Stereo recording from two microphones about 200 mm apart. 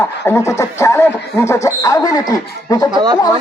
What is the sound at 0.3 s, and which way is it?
Speech, 15° left (ahead or behind).